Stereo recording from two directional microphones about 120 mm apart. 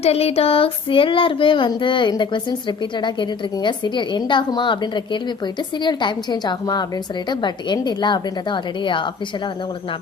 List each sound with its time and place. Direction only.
0.0 s child singing: 60° left (ahead or behind); by 9.0 s 40° left (ahead or behind)